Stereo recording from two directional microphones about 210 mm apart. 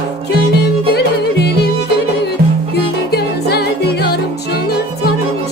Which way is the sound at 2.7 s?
50° left (ahead or behind).